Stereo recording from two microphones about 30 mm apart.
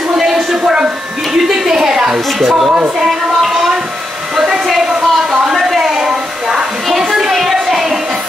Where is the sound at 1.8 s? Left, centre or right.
Centre.